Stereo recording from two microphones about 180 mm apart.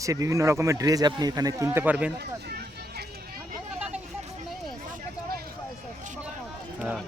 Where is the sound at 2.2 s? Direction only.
65° right (ahead or behind).